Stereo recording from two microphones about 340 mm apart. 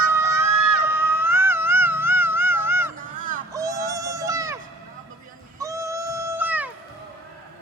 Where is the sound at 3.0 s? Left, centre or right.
Right.